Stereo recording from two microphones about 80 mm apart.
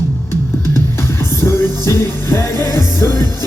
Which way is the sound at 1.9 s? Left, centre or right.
Left.